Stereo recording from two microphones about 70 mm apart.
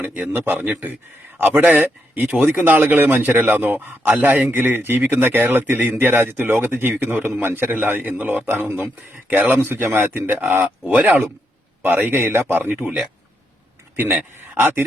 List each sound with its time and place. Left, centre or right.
0.3 s a man's voice: right
12.5 s speech: right
13.9 s a man's voice: right